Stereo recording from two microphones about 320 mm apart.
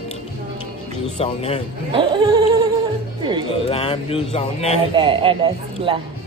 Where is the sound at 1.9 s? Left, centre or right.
Centre.